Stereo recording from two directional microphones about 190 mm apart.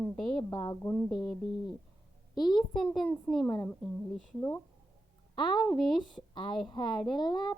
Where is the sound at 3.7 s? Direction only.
5° left (ahead or behind).